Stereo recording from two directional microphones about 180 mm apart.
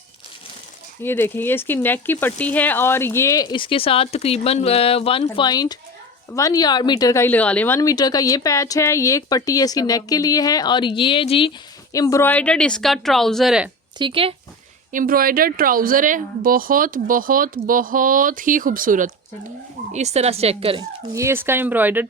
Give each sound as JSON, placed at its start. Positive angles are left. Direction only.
{"t": 1.0, "sound": "speech", "side_deg": 10}
{"t": 11.9, "sound": "a woman's voice", "side_deg": 15}
{"t": 14.0, "sound": "speech", "side_deg": -30}
{"t": 14.9, "sound": "speech", "side_deg": -50}
{"t": 21.1, "sound": "speech", "side_deg": -15}